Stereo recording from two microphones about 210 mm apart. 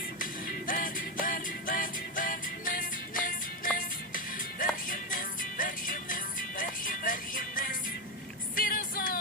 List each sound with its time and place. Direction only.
0.2 s music: 40° left (ahead or behind)